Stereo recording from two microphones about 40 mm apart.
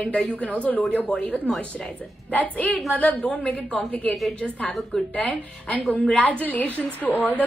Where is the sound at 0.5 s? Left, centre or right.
Left.